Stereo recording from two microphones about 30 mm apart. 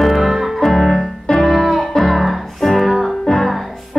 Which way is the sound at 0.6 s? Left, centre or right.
Centre.